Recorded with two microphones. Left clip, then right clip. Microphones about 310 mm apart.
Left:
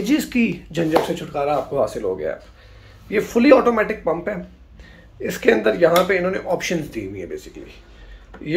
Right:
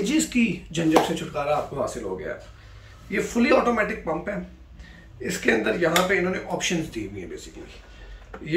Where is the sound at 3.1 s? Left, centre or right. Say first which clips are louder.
Left 7 dB; centre.